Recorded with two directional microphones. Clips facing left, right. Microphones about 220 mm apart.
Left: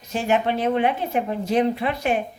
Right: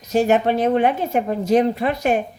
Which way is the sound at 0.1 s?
40° right (ahead or behind).